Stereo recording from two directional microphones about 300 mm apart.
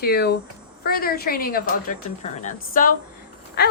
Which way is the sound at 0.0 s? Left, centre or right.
Left.